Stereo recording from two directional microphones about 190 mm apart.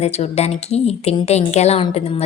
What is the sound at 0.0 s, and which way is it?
A woman's voice, 35° left (ahead or behind).